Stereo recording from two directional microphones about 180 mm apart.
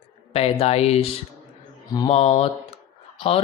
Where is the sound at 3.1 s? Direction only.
30° left (ahead or behind).